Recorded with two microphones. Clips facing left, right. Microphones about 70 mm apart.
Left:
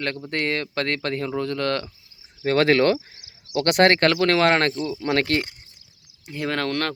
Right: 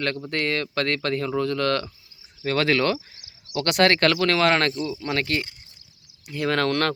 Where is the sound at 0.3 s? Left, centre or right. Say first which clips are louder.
Even; left.